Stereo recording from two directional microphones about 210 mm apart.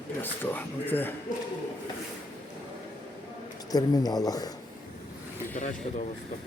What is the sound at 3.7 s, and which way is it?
Speech, 20° left (ahead or behind).